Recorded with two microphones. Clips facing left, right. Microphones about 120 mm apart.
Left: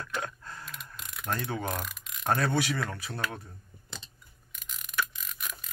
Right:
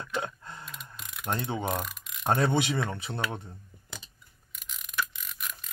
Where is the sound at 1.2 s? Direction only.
25° right (ahead or behind).